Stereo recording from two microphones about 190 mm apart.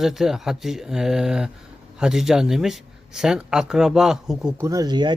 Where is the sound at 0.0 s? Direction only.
Centre (ahead or behind).